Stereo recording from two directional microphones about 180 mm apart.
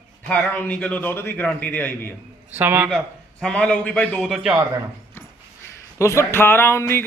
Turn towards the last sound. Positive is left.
turn(degrees=15)  # may be behind; listen again after turning